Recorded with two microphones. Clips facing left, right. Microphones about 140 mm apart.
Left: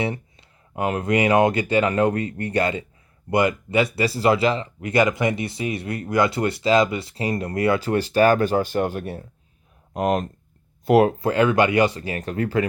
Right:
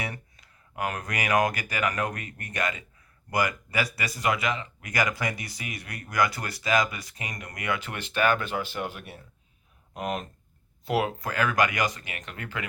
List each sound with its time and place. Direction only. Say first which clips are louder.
0.0 s speech: left 10 dB; 25° left (ahead or behind); by 11.1 s 45° left (ahead or behind)
11.2 s speech: left 8 dB; 30° left (ahead or behind)